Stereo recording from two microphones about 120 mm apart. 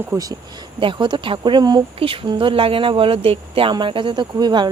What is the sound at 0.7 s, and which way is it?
Speech, 40° right (ahead or behind).